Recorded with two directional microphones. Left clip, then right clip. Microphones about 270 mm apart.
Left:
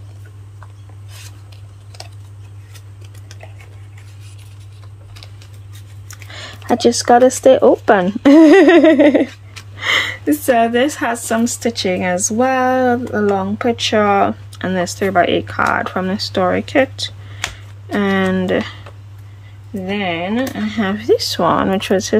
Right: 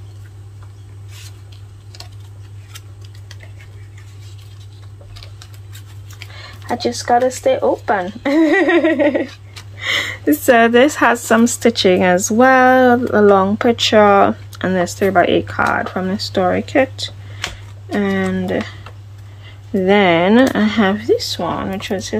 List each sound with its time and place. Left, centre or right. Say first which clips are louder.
6.3 s speech: left 5 dB; left
9.8 s a sound: left 3 dB; centre
10.4 s a woman's voice: right 4 dB; centre
19.8 s speech: right 8 dB; centre